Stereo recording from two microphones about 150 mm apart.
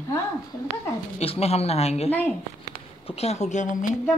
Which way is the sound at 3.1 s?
45° left (ahead or behind).